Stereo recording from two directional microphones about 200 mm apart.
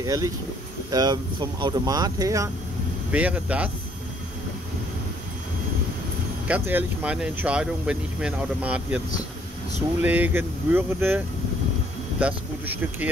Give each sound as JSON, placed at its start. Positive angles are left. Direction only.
{"t": 0.0, "sound": "speech", "side_deg": -20}
{"t": 6.4, "sound": "speech", "side_deg": -10}
{"t": 10.0, "sound": "speech", "side_deg": -10}